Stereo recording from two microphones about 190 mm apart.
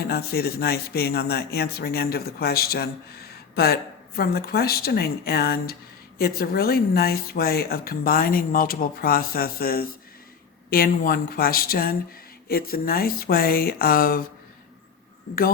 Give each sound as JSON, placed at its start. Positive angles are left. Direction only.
{"t": 0.1, "sound": "speech", "side_deg": 55}